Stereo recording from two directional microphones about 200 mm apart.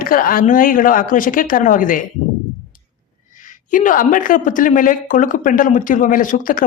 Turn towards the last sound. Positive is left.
turn(degrees=45)  # may be behind; listen again after turning